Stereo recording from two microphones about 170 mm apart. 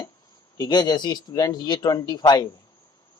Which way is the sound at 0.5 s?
25° left (ahead or behind).